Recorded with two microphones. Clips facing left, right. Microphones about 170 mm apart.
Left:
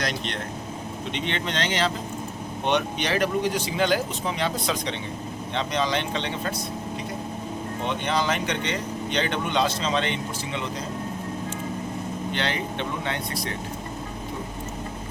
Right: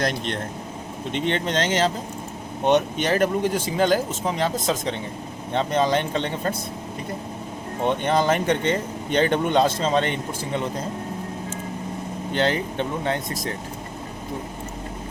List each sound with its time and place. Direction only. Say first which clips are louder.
1.1 s a man's voice: right 6 dB; 45° right (ahead or behind)
7.9 s a man's voice: right 6 dB; 50° right (ahead or behind)
12.3 s a man's voice: right 8 dB; 40° right (ahead or behind)